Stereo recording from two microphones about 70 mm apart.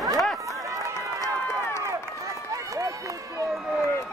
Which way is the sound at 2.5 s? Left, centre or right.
Right.